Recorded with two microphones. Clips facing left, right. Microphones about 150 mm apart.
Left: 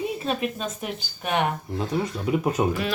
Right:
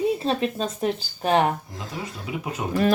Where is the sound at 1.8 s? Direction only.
40° left (ahead or behind).